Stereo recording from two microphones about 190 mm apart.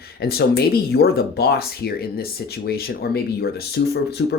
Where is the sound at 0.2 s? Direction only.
55° left (ahead or behind).